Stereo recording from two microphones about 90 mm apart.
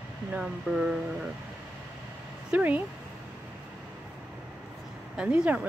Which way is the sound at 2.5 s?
20° right (ahead or behind).